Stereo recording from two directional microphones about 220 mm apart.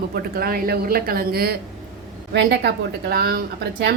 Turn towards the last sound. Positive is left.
turn(degrees=-50)  # may be behind; listen again after turning